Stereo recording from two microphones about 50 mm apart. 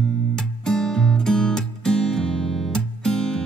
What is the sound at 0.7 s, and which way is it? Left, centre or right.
Music, centre.